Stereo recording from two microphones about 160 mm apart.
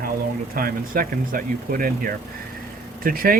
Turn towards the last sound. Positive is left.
turn(degrees=-65)  # may be behind; listen again after turning